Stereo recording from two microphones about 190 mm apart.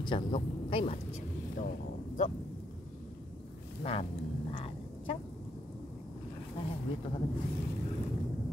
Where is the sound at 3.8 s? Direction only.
30° left (ahead or behind).